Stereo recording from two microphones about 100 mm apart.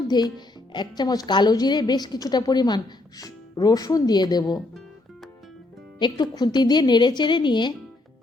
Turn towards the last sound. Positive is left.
turn(degrees=50)  # may be behind; listen again after turning